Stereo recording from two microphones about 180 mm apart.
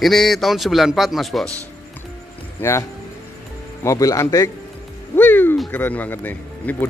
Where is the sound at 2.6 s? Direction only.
10° left (ahead or behind).